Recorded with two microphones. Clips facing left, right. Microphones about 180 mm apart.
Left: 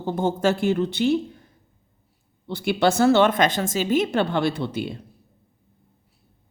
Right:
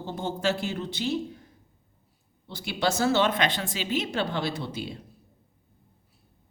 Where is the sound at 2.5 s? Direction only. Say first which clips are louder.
Left 7 dB; 60° left (ahead or behind).